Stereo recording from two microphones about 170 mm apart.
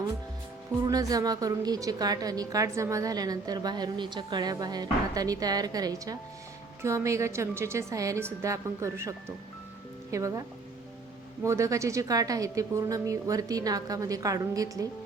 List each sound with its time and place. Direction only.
0.9 s a woman's voice: 20° right (ahead or behind)
11.4 s a woman's voice: 20° right (ahead or behind)